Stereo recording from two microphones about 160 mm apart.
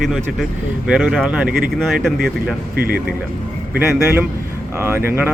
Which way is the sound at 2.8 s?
70° right (ahead or behind).